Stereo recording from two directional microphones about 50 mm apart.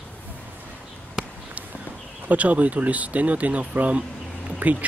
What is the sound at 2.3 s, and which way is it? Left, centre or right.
Speech, right.